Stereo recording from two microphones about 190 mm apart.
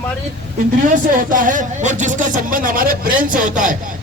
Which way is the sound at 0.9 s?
45° right (ahead or behind).